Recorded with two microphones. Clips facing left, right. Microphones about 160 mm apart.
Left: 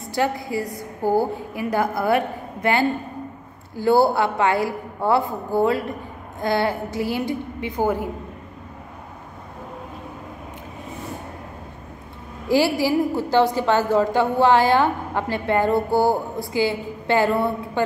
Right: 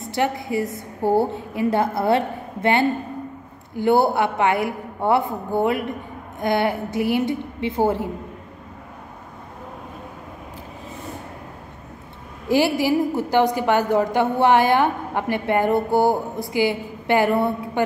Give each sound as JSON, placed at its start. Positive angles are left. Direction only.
{"t": 0.1, "sound": "a woman's voice", "side_deg": -20}
{"t": 12.4, "sound": "a woman's voice", "side_deg": -20}